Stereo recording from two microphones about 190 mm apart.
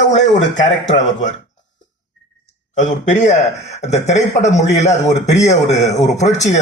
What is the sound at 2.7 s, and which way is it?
A man's voice, 40° left (ahead or behind).